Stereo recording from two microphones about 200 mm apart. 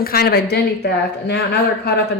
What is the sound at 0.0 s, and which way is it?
A man's voice, 50° left (ahead or behind).